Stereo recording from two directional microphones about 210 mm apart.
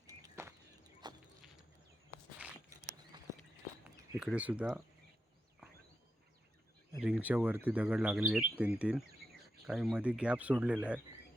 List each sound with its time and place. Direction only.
0.1 s a sound: 15° right (ahead or behind)
3.1 s walk: 20° right (ahead or behind)
4.2 s speech: 5° right (ahead or behind)
7.0 s speech: 5° right (ahead or behind)